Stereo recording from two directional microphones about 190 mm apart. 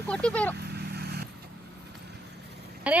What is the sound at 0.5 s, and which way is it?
Vehicle, 60° right (ahead or behind).